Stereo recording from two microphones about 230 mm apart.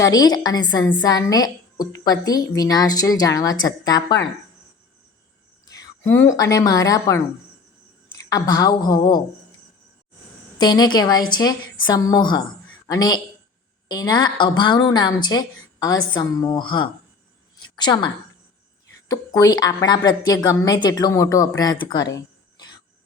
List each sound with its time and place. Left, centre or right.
0.0 s a woman's voice: centre
5.8 s a sound: centre
6.3 s a woman's voice: centre
8.3 s a woman's voice: centre
10.6 s a woman's voice: centre
19.4 s a woman's voice: centre